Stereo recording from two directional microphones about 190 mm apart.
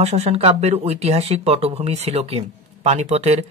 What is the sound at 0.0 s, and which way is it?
Speech, 35° right (ahead or behind).